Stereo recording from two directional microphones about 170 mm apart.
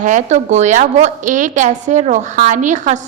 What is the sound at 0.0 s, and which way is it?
A woman's voice, 45° right (ahead or behind).